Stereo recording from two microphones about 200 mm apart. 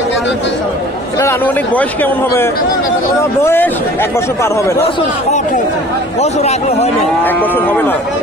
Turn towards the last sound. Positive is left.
turn(degrees=10)  # may be behind; listen again after turning